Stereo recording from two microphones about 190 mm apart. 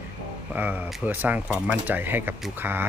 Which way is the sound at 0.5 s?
10° right (ahead or behind).